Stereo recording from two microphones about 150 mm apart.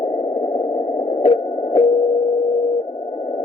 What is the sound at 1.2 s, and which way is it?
Radio, 35° left (ahead or behind).